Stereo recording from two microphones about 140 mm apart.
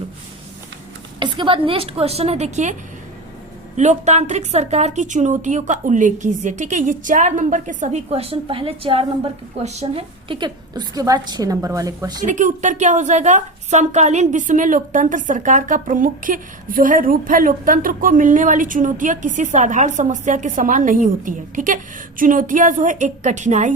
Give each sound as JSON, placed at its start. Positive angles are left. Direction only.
{"t": 1.2, "sound": "speech", "side_deg": -35}
{"t": 3.8, "sound": "a woman's voice", "side_deg": -55}
{"t": 8.1, "sound": "a woman's voice", "side_deg": -45}
{"t": 12.2, "sound": "a woman's voice", "side_deg": -65}